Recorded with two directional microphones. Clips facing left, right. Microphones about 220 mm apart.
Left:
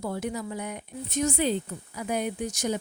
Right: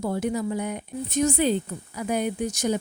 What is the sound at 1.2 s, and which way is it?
Speech, 40° right (ahead or behind).